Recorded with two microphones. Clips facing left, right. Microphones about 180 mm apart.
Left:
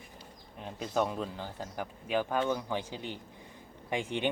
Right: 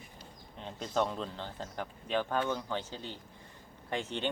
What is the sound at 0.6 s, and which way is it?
Speech, 10° left (ahead or behind).